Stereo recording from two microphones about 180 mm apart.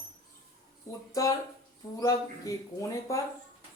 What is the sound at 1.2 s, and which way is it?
Speech, 20° left (ahead or behind).